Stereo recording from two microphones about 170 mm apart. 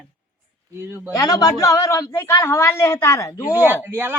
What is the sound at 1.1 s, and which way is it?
A man's voice, 20° left (ahead or behind).